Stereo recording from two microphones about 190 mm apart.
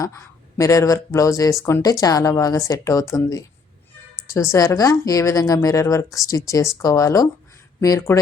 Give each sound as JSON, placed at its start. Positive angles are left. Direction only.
{"t": 0.0, "sound": "a woman's voice", "side_deg": 15}